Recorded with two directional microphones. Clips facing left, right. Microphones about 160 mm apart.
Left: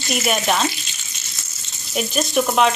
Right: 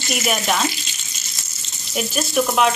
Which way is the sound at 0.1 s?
5° right (ahead or behind).